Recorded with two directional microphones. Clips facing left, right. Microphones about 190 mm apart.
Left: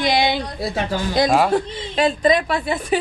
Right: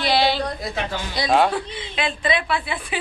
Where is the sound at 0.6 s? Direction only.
40° left (ahead or behind).